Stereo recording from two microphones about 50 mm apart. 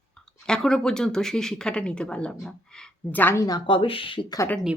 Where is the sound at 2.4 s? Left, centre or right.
Centre.